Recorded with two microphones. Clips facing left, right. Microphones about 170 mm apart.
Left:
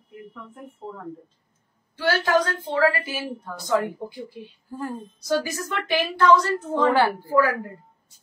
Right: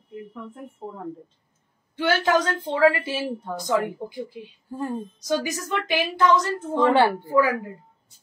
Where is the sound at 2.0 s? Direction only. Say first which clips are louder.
Even; 20° right (ahead or behind).